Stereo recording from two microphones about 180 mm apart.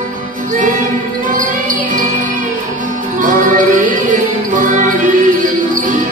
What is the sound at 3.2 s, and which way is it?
Music, 45° right (ahead or behind).